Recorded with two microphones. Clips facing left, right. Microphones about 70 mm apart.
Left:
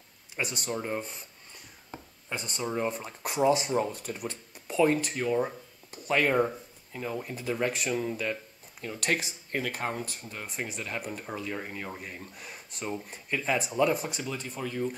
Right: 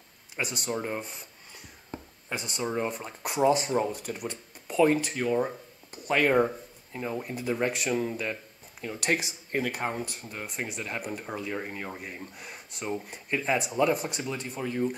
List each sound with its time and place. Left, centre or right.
0.4 s speech: centre
2.2 s speech: centre
6.3 s speech: centre
9.7 s speech: centre
14.6 s speech: centre